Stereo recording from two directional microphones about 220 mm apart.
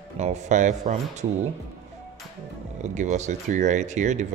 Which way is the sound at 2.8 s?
35° right (ahead or behind).